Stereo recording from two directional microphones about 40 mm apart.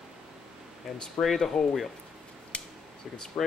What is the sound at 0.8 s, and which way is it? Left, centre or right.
Speech, centre.